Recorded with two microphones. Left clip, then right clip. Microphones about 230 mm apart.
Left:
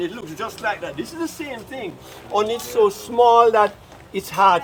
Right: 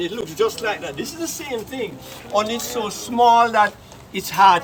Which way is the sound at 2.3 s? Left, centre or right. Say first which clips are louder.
Left 3 dB; left.